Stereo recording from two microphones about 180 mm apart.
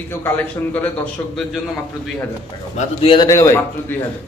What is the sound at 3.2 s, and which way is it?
Speech, 15° left (ahead or behind).